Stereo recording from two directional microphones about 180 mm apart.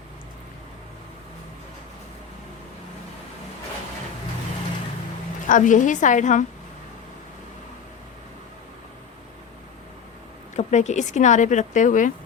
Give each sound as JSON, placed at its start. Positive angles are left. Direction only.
{"t": 5.5, "sound": "speech", "side_deg": 45}
{"t": 10.5, "sound": "speech", "side_deg": 40}